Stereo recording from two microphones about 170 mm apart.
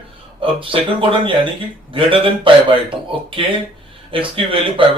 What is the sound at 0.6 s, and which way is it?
Speech, 30° right (ahead or behind).